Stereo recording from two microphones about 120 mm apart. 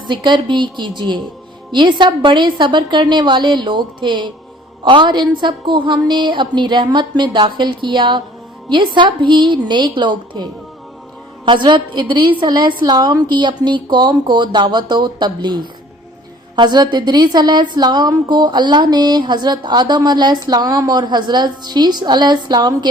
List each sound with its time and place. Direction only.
0.1 s a woman's voice: 40° right (ahead or behind)